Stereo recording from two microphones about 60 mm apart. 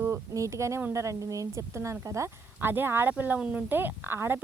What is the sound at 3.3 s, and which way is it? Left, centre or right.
Speech, centre.